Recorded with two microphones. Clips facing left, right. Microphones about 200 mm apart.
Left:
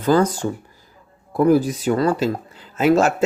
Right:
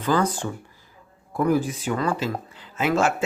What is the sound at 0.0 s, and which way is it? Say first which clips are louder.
Speech: left 6 dB; 40° left (ahead or behind).